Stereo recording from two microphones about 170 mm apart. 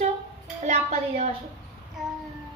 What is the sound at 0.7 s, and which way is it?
Speech, 40° right (ahead or behind).